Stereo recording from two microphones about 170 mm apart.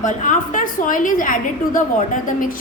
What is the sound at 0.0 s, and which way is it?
A woman's voice, 50° left (ahead or behind).